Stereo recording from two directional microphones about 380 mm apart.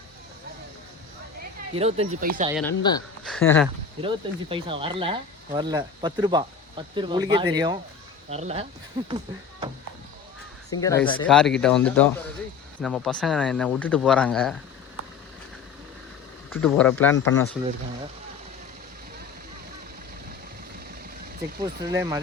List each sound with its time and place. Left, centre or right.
1.4 s speech: centre
2.5 s speech: centre
4.0 s speech: centre
10.7 s speech: centre
11.3 s speech: centre
16.5 s speech: centre
21.6 s speech: centre